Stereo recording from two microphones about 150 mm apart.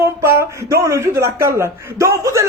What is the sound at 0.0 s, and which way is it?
Speech, 15° right (ahead or behind).